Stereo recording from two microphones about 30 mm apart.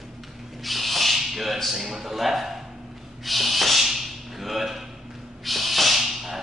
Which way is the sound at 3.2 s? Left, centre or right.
Centre.